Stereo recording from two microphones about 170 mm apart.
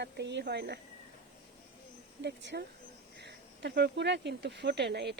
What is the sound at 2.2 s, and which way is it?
Speech, 90° right.